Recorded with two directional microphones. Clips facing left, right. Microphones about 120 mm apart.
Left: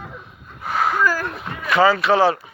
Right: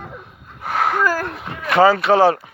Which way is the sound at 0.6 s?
65° right (ahead or behind).